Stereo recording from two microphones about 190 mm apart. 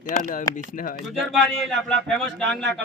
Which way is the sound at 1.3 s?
Centre (ahead or behind).